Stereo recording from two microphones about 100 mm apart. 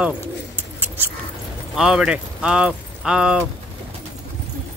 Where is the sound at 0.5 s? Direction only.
20° right (ahead or behind).